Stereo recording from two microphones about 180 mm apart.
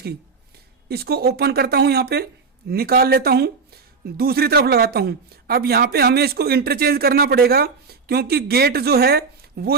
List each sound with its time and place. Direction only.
0.9 s speech: 60° right (ahead or behind)